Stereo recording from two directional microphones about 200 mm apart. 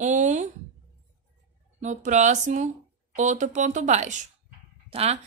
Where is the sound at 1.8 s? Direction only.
35° right (ahead or behind).